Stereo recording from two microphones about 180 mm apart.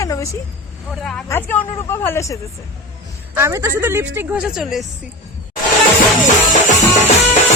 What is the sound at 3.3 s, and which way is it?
Speech, 15° right (ahead or behind).